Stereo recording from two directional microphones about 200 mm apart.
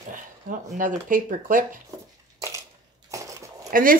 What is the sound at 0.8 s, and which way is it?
A woman's voice, 40° right (ahead or behind).